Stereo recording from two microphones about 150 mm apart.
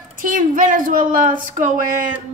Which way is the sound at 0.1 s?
65° right (ahead or behind).